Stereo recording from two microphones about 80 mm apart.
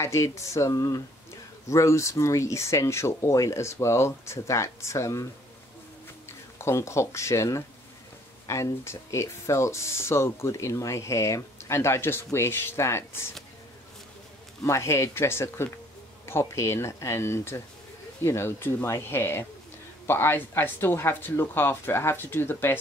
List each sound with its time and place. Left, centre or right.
0.0 s speech: left
6.6 s speech: left
14.6 s speech: left